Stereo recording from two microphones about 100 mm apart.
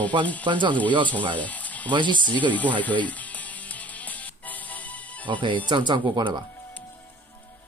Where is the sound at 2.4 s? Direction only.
15° left (ahead or behind).